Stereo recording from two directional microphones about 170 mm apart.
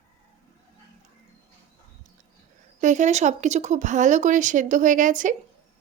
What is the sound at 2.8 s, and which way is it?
Speech, 45° right (ahead or behind).